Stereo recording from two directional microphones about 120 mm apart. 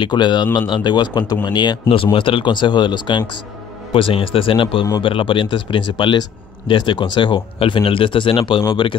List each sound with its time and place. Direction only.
0.0 s speech: 40° left (ahead or behind)